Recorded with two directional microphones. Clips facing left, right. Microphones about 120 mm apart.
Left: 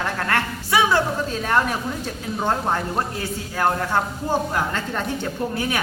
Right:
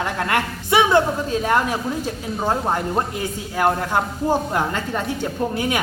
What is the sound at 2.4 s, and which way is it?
Speech, 10° right (ahead or behind).